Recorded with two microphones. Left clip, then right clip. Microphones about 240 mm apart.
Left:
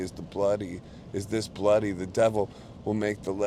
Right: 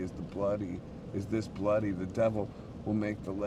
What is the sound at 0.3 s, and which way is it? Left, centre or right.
Speech, left.